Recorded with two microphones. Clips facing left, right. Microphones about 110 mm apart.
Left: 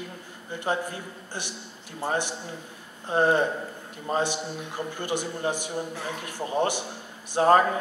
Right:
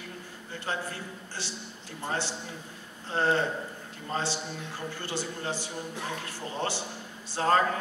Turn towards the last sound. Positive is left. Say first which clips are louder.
# left 6 dB
turn(degrees=15)  # may be behind; listen again after turning